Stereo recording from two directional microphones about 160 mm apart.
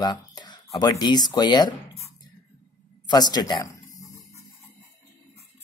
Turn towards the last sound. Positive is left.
turn(degrees=25)  # may be behind; listen again after turning